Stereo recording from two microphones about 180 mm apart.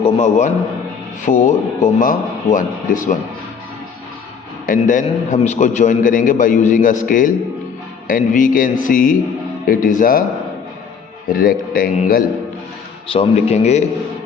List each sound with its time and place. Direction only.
0.0 s a man's voice: 40° left (ahead or behind)
4.6 s a man's voice: 45° left (ahead or behind)
11.3 s a man's voice: 55° left (ahead or behind)
13.1 s speech: 35° left (ahead or behind)